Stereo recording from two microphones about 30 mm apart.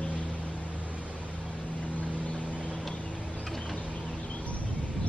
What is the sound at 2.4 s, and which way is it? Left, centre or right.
Vehicle, right.